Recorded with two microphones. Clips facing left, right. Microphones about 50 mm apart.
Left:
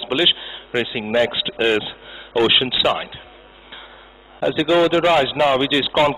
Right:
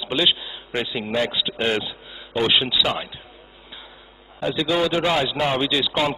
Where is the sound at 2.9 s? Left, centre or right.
Centre.